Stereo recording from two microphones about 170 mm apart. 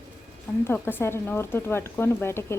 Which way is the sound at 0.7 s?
10° left (ahead or behind).